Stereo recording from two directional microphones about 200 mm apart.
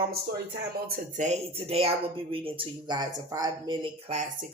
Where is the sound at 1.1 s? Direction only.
35° right (ahead or behind).